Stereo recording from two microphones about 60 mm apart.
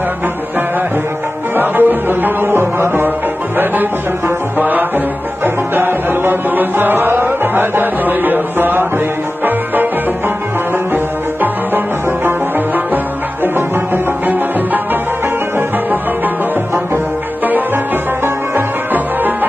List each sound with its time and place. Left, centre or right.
1.6 s music: right
4.6 s music: right
12.3 s music: right